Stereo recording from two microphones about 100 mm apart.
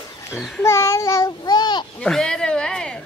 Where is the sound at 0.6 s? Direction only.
25° left (ahead or behind); by 1.8 s 45° left (ahead or behind).